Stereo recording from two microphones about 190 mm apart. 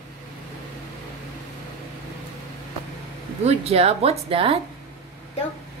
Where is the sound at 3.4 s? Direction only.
30° right (ahead or behind).